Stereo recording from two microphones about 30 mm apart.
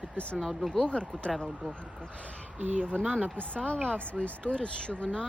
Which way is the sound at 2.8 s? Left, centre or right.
Left.